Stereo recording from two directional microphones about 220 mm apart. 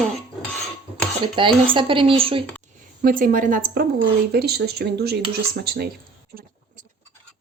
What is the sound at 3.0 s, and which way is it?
A woman's voice, 40° right (ahead or behind).